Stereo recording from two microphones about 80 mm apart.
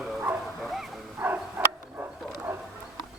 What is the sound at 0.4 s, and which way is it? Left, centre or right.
Bow-wow, centre.